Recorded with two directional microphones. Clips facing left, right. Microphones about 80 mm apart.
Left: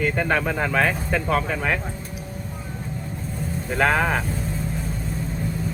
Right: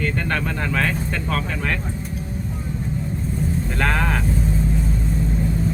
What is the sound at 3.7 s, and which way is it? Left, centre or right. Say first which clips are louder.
Speech: left 4 dB; centre.